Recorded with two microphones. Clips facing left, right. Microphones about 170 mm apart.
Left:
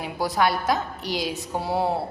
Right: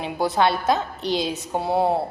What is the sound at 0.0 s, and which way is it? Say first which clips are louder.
A woman's voice: right 2 dB; 25° right (ahead or behind).